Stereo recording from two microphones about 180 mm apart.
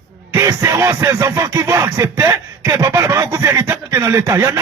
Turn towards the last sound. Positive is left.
turn(degrees=-15)  # may be behind; listen again after turning